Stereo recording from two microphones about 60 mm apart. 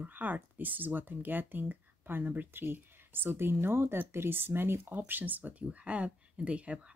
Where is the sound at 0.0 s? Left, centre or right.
Right.